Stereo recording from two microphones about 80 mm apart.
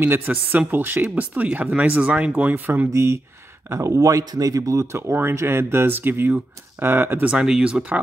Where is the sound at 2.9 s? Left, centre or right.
Right.